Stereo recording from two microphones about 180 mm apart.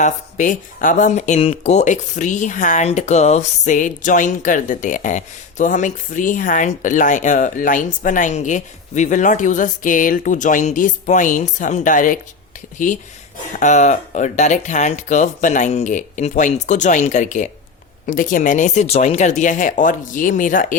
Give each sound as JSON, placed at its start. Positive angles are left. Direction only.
{"t": 0.0, "sound": "speech", "side_deg": 45}